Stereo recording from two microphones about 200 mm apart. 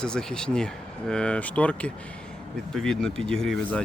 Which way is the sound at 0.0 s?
5° left (ahead or behind).